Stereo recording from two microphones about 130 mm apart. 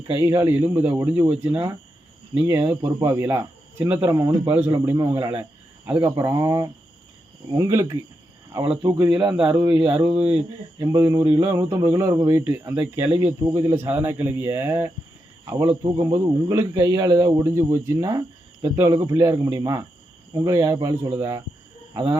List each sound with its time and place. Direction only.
0.1 s speech: 25° right (ahead or behind)
9.3 s speech: 10° right (ahead or behind)
9.6 s speech: 25° right (ahead or behind)
10.1 s speech: 45° right (ahead or behind)
10.8 s speech: 30° right (ahead or behind)
15.8 s speech: 35° right (ahead or behind)